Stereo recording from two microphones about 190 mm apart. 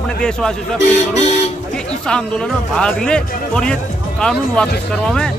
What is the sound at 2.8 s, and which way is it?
A man's voice, 5° left (ahead or behind).